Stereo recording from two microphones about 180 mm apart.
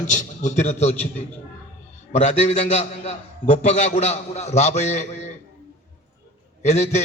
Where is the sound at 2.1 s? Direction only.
40° left (ahead or behind).